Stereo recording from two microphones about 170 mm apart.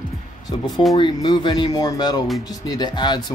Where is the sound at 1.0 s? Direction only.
25° left (ahead or behind).